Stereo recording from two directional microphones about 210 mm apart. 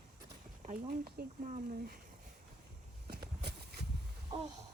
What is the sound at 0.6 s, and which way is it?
Speech, 45° right (ahead or behind).